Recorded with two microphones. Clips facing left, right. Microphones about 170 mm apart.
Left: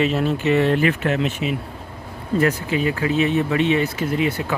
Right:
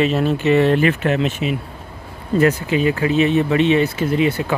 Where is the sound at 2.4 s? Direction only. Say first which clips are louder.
Right 4 dB; 20° right (ahead or behind).